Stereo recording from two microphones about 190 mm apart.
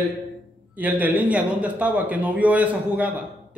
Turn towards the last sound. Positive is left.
turn(degrees=-5)  # may be behind; listen again after turning